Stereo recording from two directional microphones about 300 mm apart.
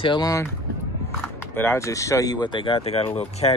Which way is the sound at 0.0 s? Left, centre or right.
Centre.